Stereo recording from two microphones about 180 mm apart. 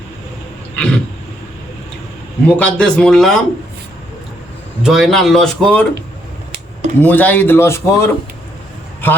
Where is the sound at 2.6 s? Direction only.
5° left (ahead or behind).